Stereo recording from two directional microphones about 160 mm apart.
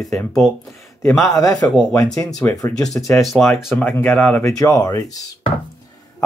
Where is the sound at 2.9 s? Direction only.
Centre (ahead or behind).